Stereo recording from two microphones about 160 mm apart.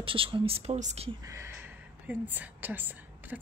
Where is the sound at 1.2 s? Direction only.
20° right (ahead or behind).